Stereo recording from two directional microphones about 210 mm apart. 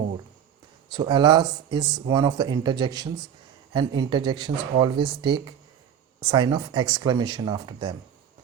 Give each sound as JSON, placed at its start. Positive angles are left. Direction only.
{"t": 0.9, "sound": "speech", "side_deg": -20}